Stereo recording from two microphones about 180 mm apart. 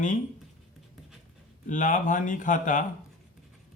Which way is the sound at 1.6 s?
45° left (ahead or behind).